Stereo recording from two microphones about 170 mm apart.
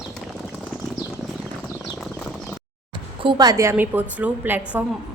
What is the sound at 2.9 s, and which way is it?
A woman's voice, 25° right (ahead or behind).